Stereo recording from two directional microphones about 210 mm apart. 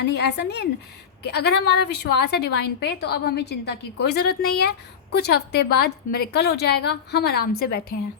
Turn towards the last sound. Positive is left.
turn(degrees=45)  # may be behind; listen again after turning